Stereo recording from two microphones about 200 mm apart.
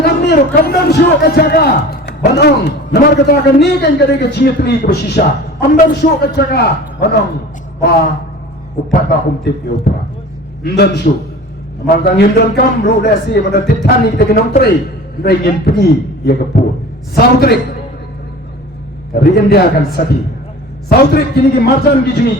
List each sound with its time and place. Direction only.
0.0 s a man's voice: 55° left (ahead or behind)
8.9 s a man's voice: 50° left (ahead or behind)
19.1 s a man's voice: 50° left (ahead or behind)